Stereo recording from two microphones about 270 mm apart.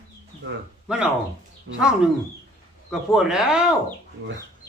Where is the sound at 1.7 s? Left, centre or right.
Right.